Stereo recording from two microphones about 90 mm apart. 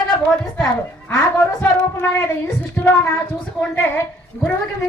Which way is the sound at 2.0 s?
20° left (ahead or behind).